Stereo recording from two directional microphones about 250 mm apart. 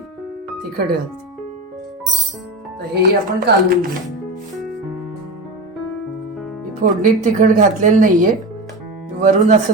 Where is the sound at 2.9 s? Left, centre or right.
Right.